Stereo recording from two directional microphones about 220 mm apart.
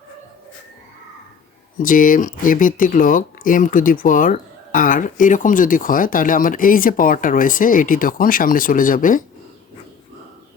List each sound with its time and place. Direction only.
1.8 s speech: 35° left (ahead or behind)